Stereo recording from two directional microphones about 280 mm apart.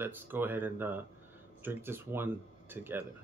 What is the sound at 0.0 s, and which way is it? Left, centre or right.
Speech, centre.